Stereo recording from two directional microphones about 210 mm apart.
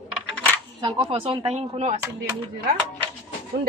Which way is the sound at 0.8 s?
25° right (ahead or behind).